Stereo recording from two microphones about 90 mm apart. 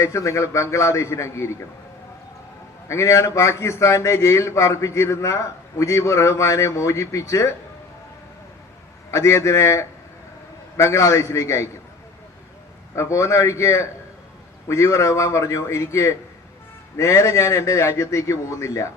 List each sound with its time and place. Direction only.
0.0 s a man's voice: 35° left (ahead or behind)
2.9 s a man's voice: 35° left (ahead or behind)
9.0 s a man's voice: 30° left (ahead or behind)
13.0 s a man's voice: 35° left (ahead or behind)